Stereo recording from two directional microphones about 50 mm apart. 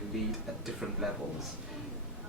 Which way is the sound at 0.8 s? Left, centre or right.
Centre.